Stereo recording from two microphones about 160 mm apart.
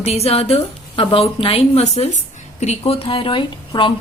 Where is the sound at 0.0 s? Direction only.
40° left (ahead or behind).